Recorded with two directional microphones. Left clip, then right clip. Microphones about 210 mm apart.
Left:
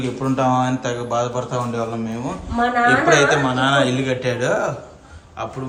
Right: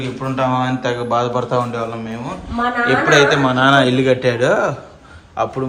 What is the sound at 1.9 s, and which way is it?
A man's voice, 25° left (ahead or behind).